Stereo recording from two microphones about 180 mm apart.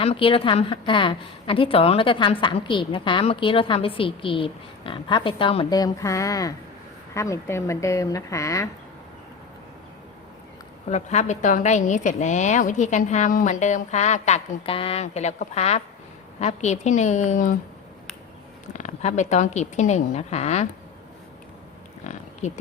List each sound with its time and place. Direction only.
0.0 s a woman's voice: 30° left (ahead or behind)
10.8 s a woman's voice: 40° left (ahead or behind)
18.7 s a woman's voice: 40° left (ahead or behind)
22.0 s a sound: 40° left (ahead or behind)